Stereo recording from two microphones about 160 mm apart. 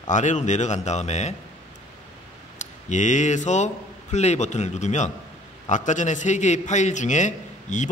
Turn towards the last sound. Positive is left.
turn(degrees=50)  # may be behind; listen again after turning